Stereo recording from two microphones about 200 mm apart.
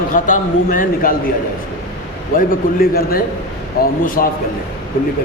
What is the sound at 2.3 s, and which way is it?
A man's voice, 45° left (ahead or behind).